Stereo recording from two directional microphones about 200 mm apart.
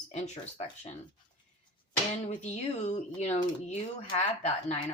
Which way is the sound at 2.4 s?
35° left (ahead or behind).